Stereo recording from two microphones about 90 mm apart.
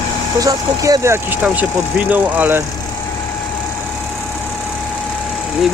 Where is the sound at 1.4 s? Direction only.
15° right (ahead or behind).